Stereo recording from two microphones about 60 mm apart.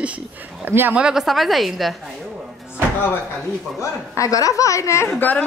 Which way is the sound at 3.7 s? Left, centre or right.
Left.